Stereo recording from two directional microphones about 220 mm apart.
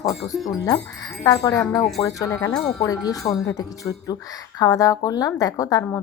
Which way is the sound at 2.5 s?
Centre (ahead or behind).